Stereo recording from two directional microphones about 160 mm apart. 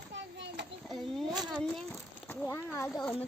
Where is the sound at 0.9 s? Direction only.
Centre (ahead or behind).